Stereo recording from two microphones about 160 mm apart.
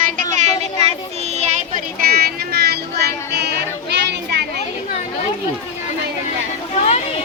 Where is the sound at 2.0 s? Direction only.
80° right.